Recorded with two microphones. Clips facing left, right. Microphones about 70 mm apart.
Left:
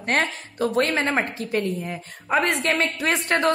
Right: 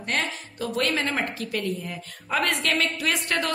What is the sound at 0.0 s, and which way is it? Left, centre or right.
A woman's voice, left.